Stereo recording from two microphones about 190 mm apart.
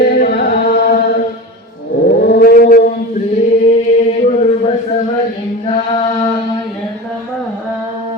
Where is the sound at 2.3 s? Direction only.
50° left (ahead or behind).